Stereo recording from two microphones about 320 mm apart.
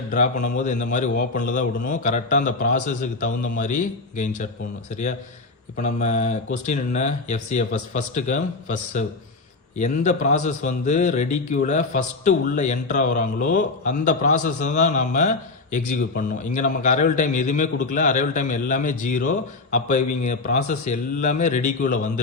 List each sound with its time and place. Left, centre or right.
0.4 s a man's voice: left
5.7 s a man's voice: left